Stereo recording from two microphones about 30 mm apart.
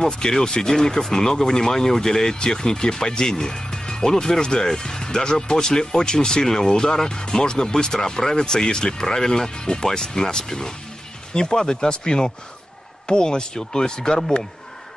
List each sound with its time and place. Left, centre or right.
0.2 s speech: centre